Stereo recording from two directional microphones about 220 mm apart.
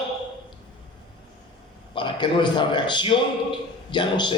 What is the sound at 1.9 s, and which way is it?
A man's voice, 20° left (ahead or behind).